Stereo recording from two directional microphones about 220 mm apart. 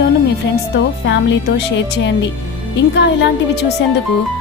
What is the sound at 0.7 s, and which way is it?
Speech, 55° left (ahead or behind).